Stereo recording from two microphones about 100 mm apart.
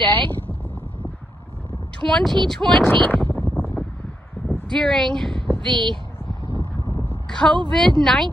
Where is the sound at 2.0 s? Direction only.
5° left (ahead or behind).